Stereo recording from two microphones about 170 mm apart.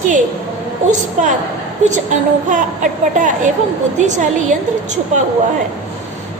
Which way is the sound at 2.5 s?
50° right (ahead or behind).